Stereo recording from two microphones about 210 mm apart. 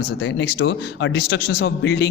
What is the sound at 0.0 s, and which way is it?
A man's voice, 55° left (ahead or behind).